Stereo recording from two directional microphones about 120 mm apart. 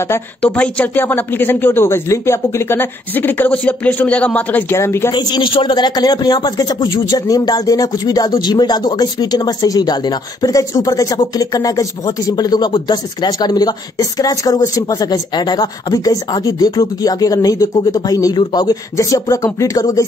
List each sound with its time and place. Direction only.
0.4 s speech: 10° left (ahead or behind)
5.1 s speech: 40° left (ahead or behind)